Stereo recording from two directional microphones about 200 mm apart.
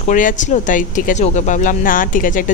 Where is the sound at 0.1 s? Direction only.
40° left (ahead or behind).